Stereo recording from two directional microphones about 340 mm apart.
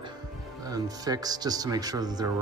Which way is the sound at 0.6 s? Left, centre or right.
Centre.